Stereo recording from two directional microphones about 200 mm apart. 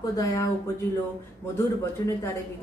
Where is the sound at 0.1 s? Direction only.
15° left (ahead or behind).